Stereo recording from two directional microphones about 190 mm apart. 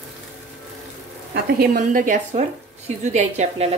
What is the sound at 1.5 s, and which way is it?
A woman's voice, 50° right (ahead or behind).